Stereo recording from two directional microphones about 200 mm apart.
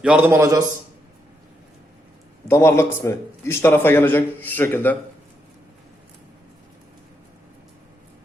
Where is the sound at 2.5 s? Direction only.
15° left (ahead or behind).